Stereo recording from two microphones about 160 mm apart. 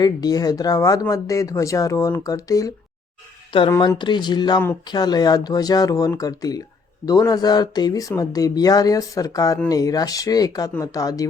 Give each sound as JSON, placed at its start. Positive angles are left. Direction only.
{"t": 0.0, "sound": "speech", "side_deg": 25}